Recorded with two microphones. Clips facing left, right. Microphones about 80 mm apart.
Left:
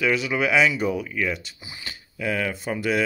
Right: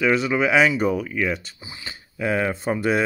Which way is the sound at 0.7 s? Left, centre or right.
Right.